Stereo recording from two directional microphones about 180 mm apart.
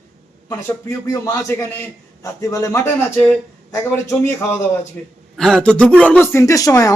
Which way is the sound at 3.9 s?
10° left (ahead or behind).